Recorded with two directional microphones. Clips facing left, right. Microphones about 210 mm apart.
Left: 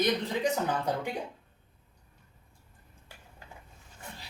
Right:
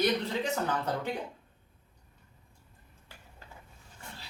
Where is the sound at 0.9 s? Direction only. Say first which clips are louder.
Left 2 dB; 15° left (ahead or behind).